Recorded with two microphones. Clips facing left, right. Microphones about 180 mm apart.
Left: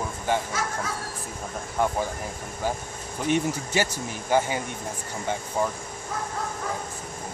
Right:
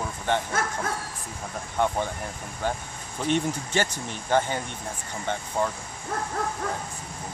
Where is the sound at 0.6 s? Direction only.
55° right (ahead or behind).